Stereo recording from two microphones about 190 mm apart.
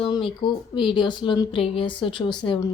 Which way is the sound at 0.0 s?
25° left (ahead or behind).